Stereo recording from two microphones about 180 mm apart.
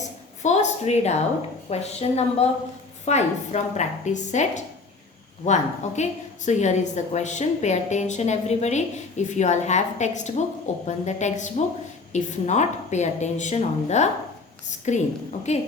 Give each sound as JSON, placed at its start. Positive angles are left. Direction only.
{"t": 0.0, "sound": "a sound", "side_deg": 40}
{"t": 1.7, "sound": "a woman's voice", "side_deg": 35}
{"t": 6.0, "sound": "a woman's voice", "side_deg": 40}